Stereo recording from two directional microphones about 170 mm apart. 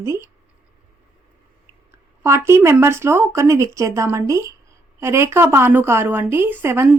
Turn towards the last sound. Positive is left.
turn(degrees=-15)  # may be behind; listen again after turning